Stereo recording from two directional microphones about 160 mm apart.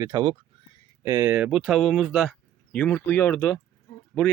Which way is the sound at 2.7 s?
10° left (ahead or behind).